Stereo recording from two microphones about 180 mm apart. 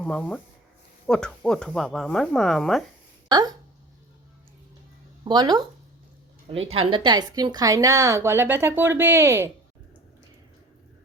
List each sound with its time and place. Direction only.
0.0 s speech: 5° left (ahead or behind)
3.2 s speech: 20° right (ahead or behind)
5.2 s speech: 25° right (ahead or behind)